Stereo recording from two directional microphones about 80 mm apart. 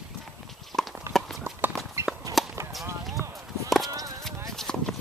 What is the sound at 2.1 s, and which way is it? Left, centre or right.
Walk, centre.